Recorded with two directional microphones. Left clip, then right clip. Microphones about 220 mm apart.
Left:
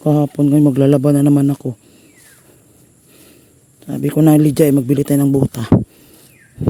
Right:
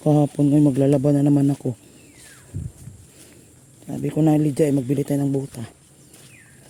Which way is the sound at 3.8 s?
35° left (ahead or behind).